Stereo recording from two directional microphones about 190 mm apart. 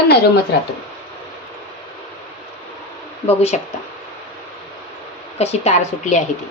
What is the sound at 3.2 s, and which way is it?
Speech, 35° left (ahead or behind).